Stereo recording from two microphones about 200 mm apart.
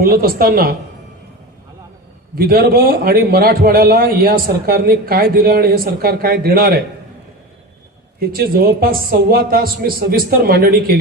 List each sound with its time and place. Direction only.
0.0 s a man's voice: 50° right (ahead or behind)
2.3 s a man's voice: 50° right (ahead or behind)
8.4 s a man's voice: 50° right (ahead or behind)